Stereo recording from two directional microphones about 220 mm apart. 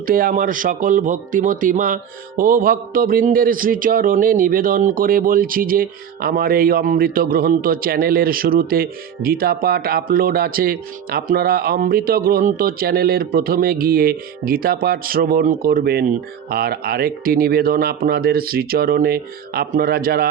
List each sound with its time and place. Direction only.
0.0 s speech: 40° right (ahead or behind)